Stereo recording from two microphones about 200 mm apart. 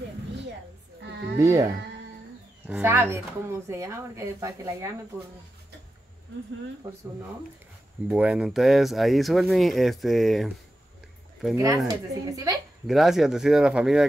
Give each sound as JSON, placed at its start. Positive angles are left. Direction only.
{"t": 1.4, "sound": "speech", "side_deg": -15}
{"t": 8.1, "sound": "speech", "side_deg": -5}
{"t": 11.5, "sound": "speech", "side_deg": -15}
{"t": 12.8, "sound": "speech", "side_deg": 0}